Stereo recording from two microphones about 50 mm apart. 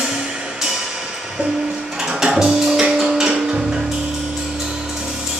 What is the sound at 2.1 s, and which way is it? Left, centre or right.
Music, centre.